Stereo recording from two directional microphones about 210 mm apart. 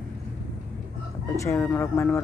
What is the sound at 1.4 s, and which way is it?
Speech, 10° left (ahead or behind).